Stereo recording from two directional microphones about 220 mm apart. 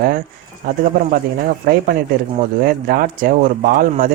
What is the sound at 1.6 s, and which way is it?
A man's voice, 40° right (ahead or behind).